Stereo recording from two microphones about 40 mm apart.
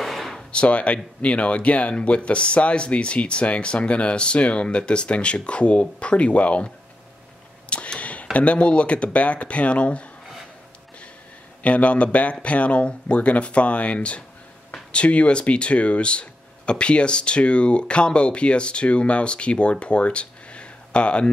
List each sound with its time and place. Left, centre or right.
0.0 s a sound: centre
0.5 s speech: left
7.7 s speech: left
11.6 s speech: left